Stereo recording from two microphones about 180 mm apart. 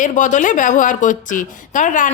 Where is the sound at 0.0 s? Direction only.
45° left (ahead or behind).